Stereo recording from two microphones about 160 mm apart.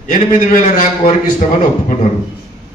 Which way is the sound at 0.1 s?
55° left (ahead or behind).